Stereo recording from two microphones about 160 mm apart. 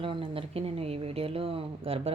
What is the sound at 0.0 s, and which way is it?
Speech, 35° right (ahead or behind).